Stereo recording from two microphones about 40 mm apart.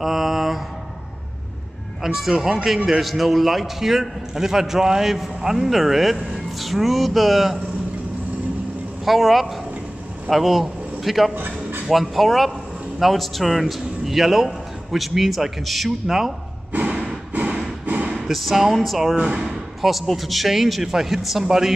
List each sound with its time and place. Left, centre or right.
0.0 s mantra: centre
2.0 s a man's voice: centre
9.0 s a man's voice: centre
11.3 s music: right
11.9 s a man's voice: centre
16.8 s a sound: right
17.3 s a sound: right
18.1 s a man's voice: centre